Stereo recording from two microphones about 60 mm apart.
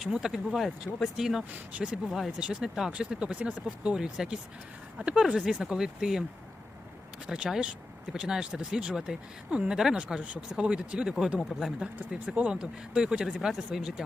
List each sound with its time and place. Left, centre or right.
0.0 s speech: centre
1.7 s speech: right
2.0 s speech: centre
2.4 s speech: centre
7.3 s speech: centre
12.2 s speech: right
12.5 s speech: centre